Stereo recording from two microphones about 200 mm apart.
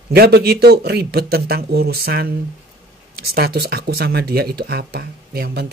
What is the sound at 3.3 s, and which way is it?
Speech, 50° right (ahead or behind).